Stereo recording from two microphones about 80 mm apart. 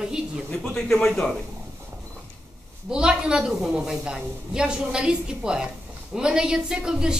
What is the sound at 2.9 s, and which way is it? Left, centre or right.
A woman's voice, centre.